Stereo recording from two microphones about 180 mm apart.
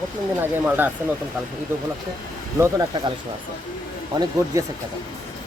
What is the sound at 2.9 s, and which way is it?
Speech, 25° right (ahead or behind).